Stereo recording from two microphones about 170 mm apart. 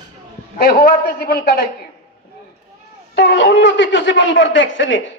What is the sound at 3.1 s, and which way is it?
A man's voice, 90° left.